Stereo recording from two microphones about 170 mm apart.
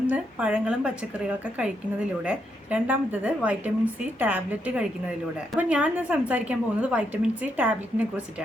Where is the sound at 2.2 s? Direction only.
10° right (ahead or behind).